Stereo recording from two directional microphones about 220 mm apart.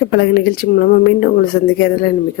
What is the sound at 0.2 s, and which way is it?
Speech, 45° left (ahead or behind).